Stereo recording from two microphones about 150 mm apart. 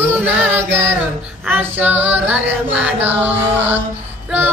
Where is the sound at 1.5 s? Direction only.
10° right (ahead or behind).